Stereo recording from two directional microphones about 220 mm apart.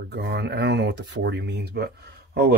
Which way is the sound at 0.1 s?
50° right (ahead or behind).